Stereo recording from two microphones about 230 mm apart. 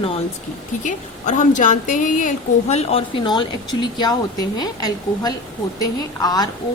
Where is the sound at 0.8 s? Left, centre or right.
Left; by 6.5 s centre.